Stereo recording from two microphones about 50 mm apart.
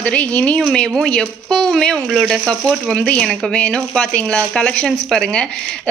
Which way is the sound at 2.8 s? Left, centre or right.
Centre.